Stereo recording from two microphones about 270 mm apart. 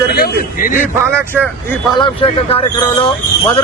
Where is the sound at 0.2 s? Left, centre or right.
Left.